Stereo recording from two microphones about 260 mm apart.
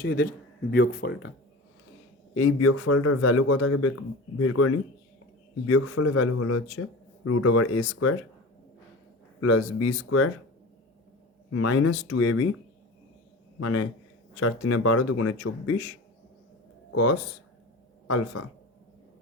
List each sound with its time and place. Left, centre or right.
0.0 s speech: left
2.3 s a man's voice: left
9.4 s a man's voice: left
11.5 s a man's voice: left
13.6 s a man's voice: left
18.4 s a man's voice: left